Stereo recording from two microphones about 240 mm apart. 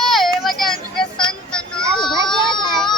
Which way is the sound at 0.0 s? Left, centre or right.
Centre.